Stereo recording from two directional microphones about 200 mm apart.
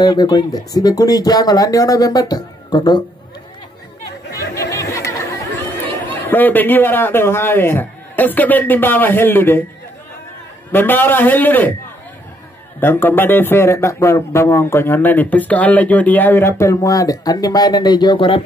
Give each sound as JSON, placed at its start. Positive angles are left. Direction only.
{"t": 0.0, "sound": "speech", "side_deg": 20}
{"t": 4.3, "sound": "chatter", "side_deg": 15}
{"t": 6.0, "sound": "speech", "side_deg": 10}
{"t": 10.7, "sound": "speech", "side_deg": 10}
{"t": 12.8, "sound": "speech", "side_deg": 10}